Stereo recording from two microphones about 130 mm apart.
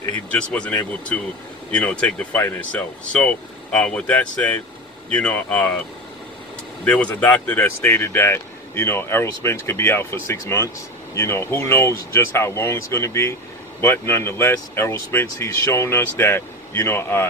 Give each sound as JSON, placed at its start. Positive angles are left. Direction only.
{"t": 0.3, "sound": "speech", "side_deg": 10}
{"t": 6.8, "sound": "speech", "side_deg": 10}